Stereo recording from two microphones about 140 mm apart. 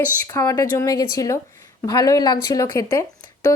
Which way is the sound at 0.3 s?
25° left (ahead or behind).